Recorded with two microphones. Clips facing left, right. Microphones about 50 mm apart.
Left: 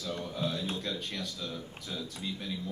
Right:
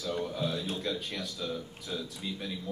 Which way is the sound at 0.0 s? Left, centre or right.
Centre.